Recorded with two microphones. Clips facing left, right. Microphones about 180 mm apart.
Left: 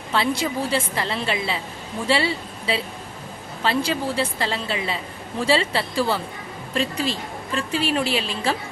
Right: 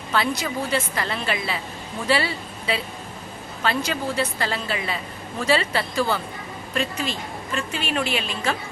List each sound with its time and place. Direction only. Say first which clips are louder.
0.1 s a woman's voice: left 2 dB; 25° left (ahead or behind)